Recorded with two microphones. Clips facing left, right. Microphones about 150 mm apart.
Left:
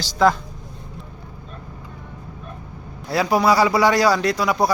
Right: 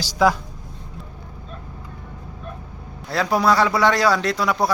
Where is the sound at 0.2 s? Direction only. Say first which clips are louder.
Left 1 dB; 10° right (ahead or behind).